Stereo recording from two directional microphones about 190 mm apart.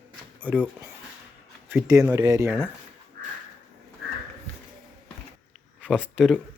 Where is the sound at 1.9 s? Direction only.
15° right (ahead or behind).